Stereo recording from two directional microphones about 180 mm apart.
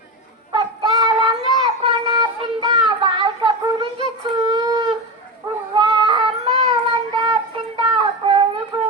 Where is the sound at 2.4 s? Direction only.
25° right (ahead or behind).